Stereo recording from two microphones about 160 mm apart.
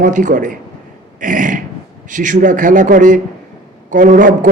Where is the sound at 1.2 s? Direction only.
55° right (ahead or behind).